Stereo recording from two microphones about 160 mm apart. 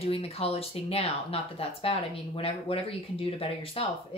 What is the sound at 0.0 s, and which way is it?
Speech, 40° left (ahead or behind).